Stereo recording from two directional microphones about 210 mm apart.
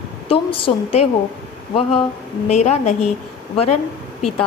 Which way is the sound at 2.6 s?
35° left (ahead or behind).